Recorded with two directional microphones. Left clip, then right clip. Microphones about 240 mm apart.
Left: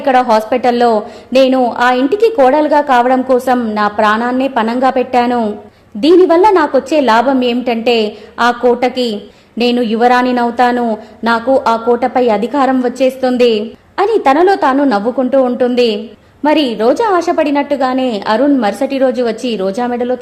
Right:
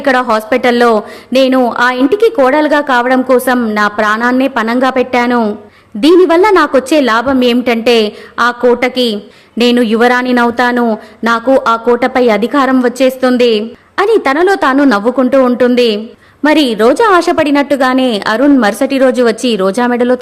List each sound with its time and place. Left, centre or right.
0.0 s speech: centre